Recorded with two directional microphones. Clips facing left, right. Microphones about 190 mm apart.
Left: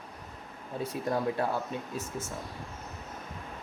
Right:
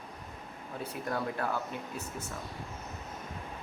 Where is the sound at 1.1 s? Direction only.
25° left (ahead or behind).